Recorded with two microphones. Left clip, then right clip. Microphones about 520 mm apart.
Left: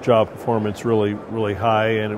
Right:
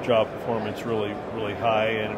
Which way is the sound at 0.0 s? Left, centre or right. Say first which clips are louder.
Left 5 dB; left.